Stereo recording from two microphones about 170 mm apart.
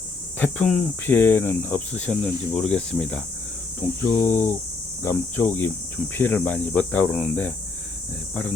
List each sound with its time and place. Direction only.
0.3 s speech: 10° left (ahead or behind)